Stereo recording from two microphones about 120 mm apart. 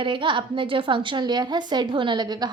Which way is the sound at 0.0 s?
45° right (ahead or behind).